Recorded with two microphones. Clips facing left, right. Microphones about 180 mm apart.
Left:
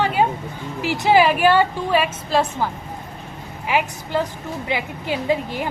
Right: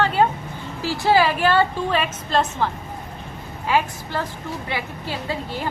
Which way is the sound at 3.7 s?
15° left (ahead or behind).